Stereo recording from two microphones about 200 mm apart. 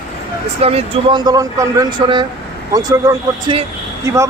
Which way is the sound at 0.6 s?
30° right (ahead or behind).